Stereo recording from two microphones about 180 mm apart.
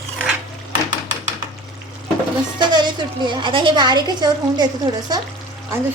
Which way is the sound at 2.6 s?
25° right (ahead or behind).